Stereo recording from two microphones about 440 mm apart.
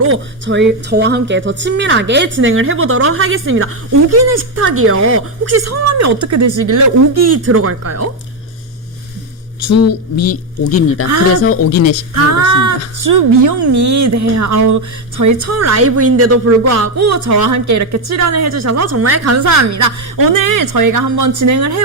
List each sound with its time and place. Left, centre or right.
0.0 s speech: right
9.6 s speech: left
13.0 s a woman's voice: right